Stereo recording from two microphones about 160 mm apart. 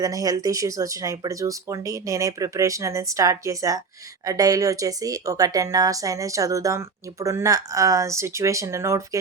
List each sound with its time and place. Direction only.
0.0 s speech: 20° right (ahead or behind)